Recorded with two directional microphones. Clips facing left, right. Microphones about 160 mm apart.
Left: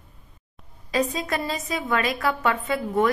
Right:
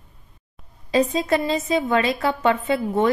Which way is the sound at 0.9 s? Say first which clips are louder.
Right 5 dB; 25° right (ahead or behind).